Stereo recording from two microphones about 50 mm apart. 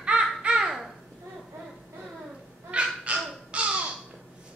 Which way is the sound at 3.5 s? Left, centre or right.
Right.